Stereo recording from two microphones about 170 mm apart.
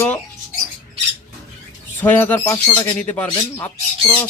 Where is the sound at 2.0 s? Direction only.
10° left (ahead or behind).